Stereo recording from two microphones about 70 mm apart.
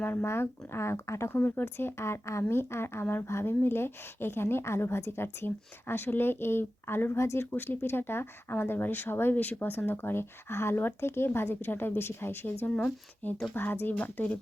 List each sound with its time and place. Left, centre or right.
0.0 s speech: left
1.3 s speech: left
7.5 s speech: left